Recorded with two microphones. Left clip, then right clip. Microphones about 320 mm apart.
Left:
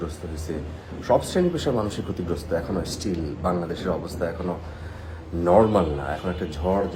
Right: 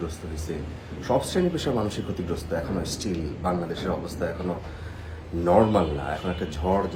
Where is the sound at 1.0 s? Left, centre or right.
Centre.